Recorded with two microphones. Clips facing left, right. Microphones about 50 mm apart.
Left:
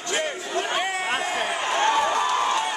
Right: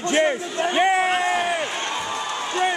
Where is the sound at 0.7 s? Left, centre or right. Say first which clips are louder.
Right 11 dB; right.